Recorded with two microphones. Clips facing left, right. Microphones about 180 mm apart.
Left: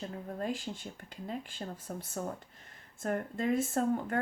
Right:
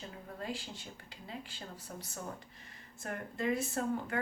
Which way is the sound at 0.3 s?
50° left (ahead or behind).